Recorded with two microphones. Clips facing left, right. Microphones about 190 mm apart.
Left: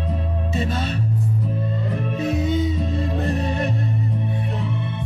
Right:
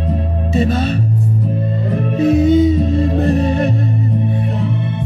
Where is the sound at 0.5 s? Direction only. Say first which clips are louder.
Right 10 dB; 70° right (ahead or behind).